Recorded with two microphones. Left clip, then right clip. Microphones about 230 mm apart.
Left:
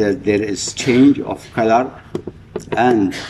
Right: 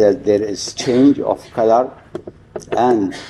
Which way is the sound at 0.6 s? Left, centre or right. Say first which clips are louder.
Left 1 dB; left.